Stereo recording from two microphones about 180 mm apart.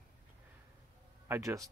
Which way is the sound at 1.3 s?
20° right (ahead or behind).